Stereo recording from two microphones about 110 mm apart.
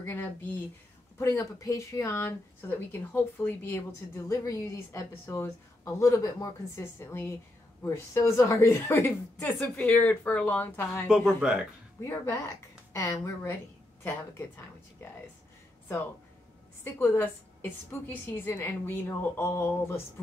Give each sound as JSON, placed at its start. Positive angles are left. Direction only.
{"t": 0.0, "sound": "speech", "side_deg": 20}
{"t": 11.2, "sound": "speech", "side_deg": -10}
{"t": 12.0, "sound": "speech", "side_deg": 25}
{"t": 16.8, "sound": "speech", "side_deg": 20}